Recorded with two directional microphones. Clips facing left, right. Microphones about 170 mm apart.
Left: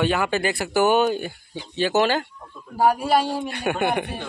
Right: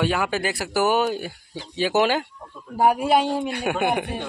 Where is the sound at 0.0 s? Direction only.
5° right (ahead or behind).